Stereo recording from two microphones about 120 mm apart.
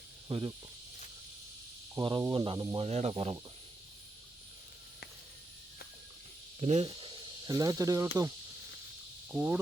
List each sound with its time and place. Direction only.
0.3 s speech: 40° right (ahead or behind)
2.0 s speech: 35° right (ahead or behind)
2.7 s speech: 60° right (ahead or behind)
6.6 s speech: 65° right (ahead or behind)
6.8 s snake: 45° right (ahead or behind)
7.5 s speech: 30° right (ahead or behind)
9.3 s a sound: 15° right (ahead or behind)